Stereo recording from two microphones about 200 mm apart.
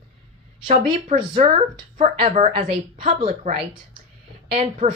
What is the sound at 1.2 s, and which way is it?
A woman's voice, 25° right (ahead or behind).